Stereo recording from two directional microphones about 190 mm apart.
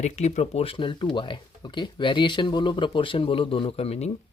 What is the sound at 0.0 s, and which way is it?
Speech, 35° left (ahead or behind).